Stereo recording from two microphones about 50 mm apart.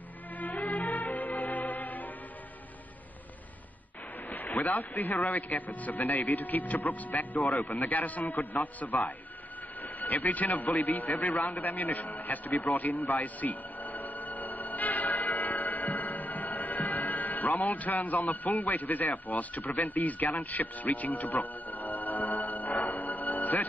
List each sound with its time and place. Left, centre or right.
0.4 s music: left
4.3 s a man's voice: left
9.8 s a sound: left